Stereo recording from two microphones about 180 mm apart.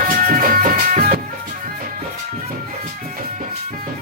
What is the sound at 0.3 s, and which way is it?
Music, 50° right (ahead or behind).